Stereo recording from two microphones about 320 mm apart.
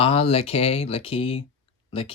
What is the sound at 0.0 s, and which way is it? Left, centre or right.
Speech, centre.